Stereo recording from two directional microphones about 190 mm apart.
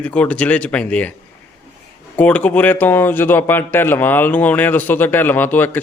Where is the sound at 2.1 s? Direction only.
10° left (ahead or behind).